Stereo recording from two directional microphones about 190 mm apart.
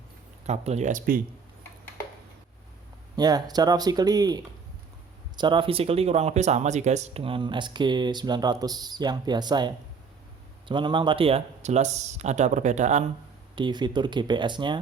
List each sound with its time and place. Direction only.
0.4 s speech: 35° right (ahead or behind)
3.2 s speech: 20° right (ahead or behind); by 13.1 s 40° right (ahead or behind)
13.6 s speech: 25° right (ahead or behind)